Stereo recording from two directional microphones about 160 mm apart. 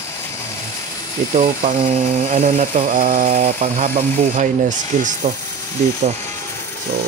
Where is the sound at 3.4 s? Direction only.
45° right (ahead or behind).